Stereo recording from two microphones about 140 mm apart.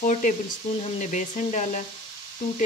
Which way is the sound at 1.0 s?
60° left (ahead or behind).